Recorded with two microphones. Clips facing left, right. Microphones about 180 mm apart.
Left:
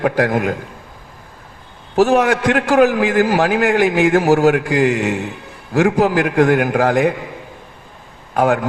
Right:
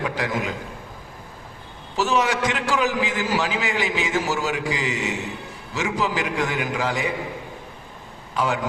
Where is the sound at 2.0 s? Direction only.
55° left (ahead or behind).